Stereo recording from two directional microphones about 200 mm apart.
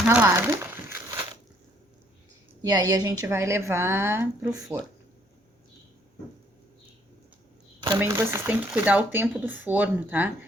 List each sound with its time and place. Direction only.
0.0 s crumpling: 10° right (ahead or behind)
2.6 s speech: 20° right (ahead or behind)
7.9 s speech: 10° right (ahead or behind)